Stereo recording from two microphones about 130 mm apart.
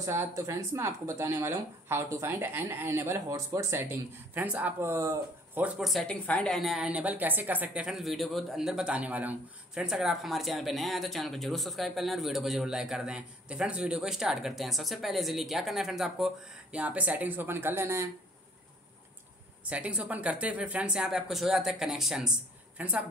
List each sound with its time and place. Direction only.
0.0 s speech: 20° right (ahead or behind)
4.9 s speech: 25° right (ahead or behind)
5.6 s a woman's voice: centre (ahead or behind); by 18.0 s 20° right (ahead or behind)
19.6 s speech: 10° right (ahead or behind)